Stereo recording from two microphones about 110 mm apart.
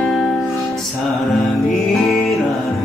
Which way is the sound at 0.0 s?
5° left (ahead or behind).